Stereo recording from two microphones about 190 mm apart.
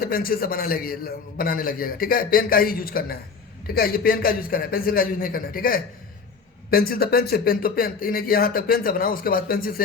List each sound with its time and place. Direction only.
0.0 s a man's voice: 50° left (ahead or behind)